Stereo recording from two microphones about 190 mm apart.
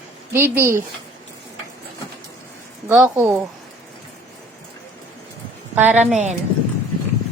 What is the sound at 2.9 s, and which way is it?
Speech, 15° right (ahead or behind).